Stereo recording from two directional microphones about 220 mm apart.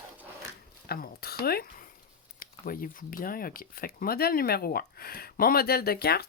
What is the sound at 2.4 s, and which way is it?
Speech, 40° left (ahead or behind).